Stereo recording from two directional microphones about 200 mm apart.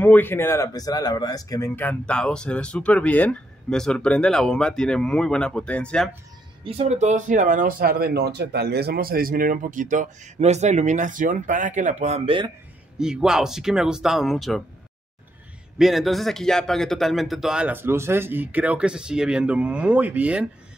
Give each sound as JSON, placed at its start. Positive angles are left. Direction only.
{"t": 0.0, "sound": "speech", "side_deg": 10}
{"t": 6.6, "sound": "speech", "side_deg": -30}
{"t": 12.9, "sound": "speech", "side_deg": -5}
{"t": 15.8, "sound": "speech", "side_deg": 0}